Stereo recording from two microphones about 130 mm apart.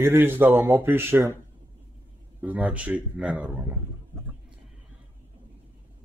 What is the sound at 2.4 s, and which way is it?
Speech, 10° right (ahead or behind).